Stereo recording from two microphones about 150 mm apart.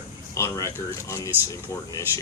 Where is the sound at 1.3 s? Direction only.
15° right (ahead or behind).